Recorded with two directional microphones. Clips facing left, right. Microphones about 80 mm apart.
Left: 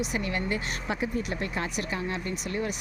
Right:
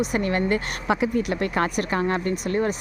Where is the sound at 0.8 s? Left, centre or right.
Right.